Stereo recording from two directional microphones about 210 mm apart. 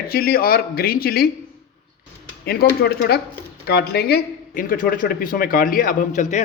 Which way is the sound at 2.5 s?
50° left (ahead or behind).